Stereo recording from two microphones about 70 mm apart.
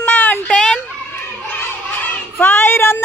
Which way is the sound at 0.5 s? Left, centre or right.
Centre.